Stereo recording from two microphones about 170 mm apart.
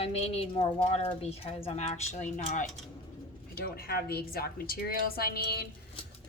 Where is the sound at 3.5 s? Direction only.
65° left (ahead or behind).